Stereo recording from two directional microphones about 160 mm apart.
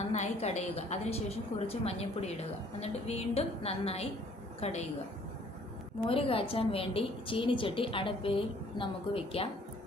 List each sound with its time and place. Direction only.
0.1 s a woman's voice: 45° left (ahead or behind)
6.1 s a woman's voice: 35° left (ahead or behind)